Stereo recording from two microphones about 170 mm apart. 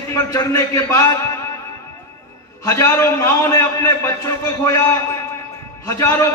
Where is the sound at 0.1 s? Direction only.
20° left (ahead or behind).